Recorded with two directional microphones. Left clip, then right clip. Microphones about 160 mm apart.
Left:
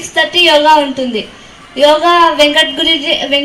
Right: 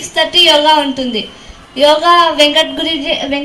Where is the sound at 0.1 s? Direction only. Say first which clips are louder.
Even; 30° left (ahead or behind).